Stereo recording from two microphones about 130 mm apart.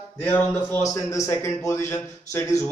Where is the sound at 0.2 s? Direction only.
15° left (ahead or behind).